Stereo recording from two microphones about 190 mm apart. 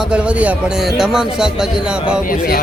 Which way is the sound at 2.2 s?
50° left (ahead or behind).